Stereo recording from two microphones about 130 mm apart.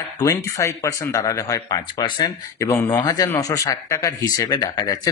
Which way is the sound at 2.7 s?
20° left (ahead or behind).